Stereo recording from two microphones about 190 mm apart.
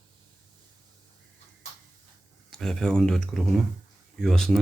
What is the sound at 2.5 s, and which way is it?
Speech, centre (ahead or behind).